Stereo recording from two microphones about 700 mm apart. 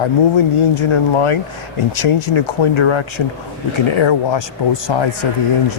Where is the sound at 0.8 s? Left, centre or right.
Left.